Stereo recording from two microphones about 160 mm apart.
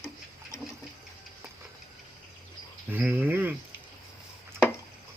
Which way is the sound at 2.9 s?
10° right (ahead or behind).